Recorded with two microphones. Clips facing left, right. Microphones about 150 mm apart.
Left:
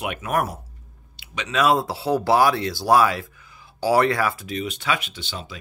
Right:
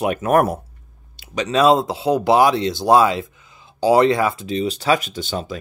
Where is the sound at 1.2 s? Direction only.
40° right (ahead or behind).